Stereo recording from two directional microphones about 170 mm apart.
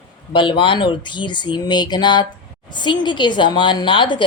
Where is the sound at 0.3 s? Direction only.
30° left (ahead or behind).